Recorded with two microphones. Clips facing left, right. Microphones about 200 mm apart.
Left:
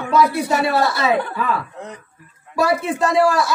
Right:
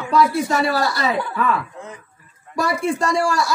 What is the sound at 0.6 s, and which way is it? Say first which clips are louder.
Speech: left 2 dB; 25° left (ahead or behind).